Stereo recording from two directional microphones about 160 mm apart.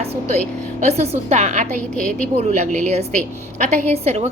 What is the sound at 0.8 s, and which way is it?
A woman's voice, 45° right (ahead or behind).